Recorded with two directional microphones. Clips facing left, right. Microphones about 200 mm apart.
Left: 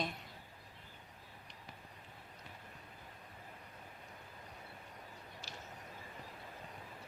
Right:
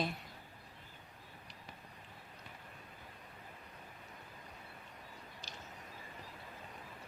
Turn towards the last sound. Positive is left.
turn(degrees=-15)  # may be behind; listen again after turning